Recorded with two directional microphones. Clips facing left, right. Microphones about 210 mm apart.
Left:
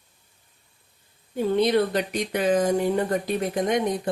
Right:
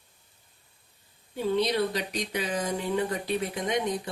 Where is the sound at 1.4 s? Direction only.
50° left (ahead or behind).